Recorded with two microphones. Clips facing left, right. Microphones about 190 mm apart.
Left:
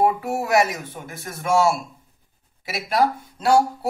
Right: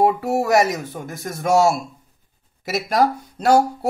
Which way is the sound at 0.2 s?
40° right (ahead or behind).